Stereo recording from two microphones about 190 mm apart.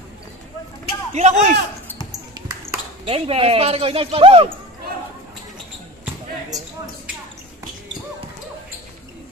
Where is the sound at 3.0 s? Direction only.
30° right (ahead or behind).